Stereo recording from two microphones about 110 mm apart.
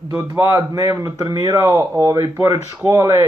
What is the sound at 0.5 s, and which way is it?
A man's voice, 30° right (ahead or behind).